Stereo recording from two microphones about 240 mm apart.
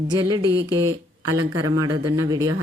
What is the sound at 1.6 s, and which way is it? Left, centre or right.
Speech, centre.